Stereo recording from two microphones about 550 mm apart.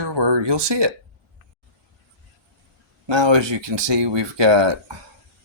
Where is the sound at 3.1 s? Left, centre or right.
Right.